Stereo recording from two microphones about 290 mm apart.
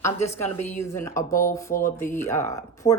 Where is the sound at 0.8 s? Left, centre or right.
Centre.